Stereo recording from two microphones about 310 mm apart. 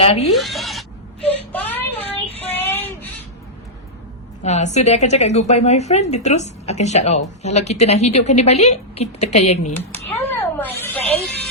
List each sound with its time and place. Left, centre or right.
0.0 s a woman's voice: centre
0.3 s speech: centre
1.5 s child singing: centre
4.4 s a woman's voice: left
10.3 s snake: centre